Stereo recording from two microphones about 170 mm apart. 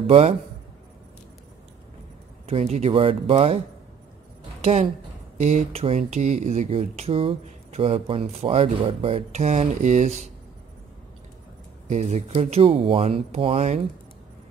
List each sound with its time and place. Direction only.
0.0 s speech: 35° right (ahead or behind)
2.4 s speech: 40° right (ahead or behind)
5.4 s speech: 40° right (ahead or behind)
11.9 s speech: 40° right (ahead or behind)